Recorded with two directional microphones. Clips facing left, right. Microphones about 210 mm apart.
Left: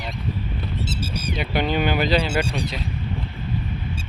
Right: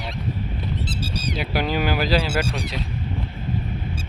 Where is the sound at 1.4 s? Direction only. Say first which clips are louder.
Left 2 dB; 5° right (ahead or behind).